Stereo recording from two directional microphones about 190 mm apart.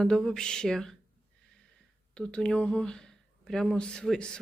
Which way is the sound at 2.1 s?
5° left (ahead or behind).